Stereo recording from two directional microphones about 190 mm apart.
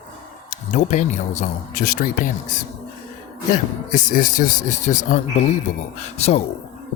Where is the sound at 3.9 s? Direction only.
45° left (ahead or behind).